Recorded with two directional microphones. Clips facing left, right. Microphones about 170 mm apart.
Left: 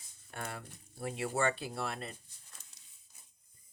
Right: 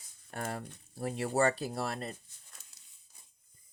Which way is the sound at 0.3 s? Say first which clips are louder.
Right 5 dB; 40° right (ahead or behind).